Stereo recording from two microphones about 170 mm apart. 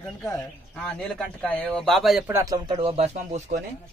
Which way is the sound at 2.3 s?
15° right (ahead or behind).